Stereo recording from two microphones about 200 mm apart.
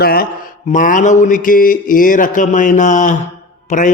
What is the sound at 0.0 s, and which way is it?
Speech, 50° left (ahead or behind).